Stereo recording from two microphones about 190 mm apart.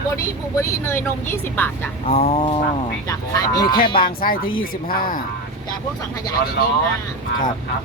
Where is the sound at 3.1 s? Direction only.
20° left (ahead or behind).